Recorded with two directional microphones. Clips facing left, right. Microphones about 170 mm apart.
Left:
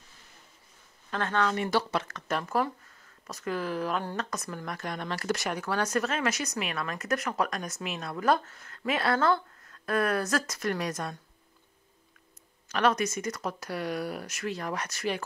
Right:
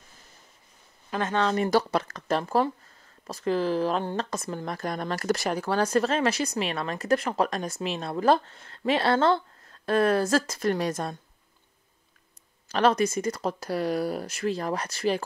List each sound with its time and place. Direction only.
1.1 s speech: 20° right (ahead or behind)
1.5 s speech: 40° right (ahead or behind)
12.6 s speech: 30° right (ahead or behind)